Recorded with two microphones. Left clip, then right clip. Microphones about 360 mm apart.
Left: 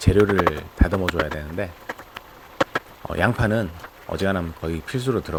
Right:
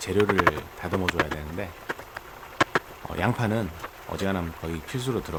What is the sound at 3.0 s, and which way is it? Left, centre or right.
Speech, centre.